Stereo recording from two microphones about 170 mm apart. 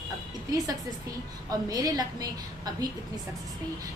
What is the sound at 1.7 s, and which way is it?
A woman's voice, 20° right (ahead or behind).